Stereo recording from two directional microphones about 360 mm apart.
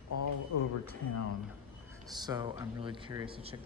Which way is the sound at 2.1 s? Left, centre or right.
Centre.